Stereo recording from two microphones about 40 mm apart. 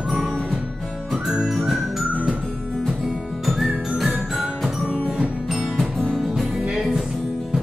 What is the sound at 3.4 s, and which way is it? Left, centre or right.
Whistling, centre.